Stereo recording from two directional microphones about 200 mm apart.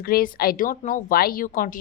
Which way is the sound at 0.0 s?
50° left (ahead or behind).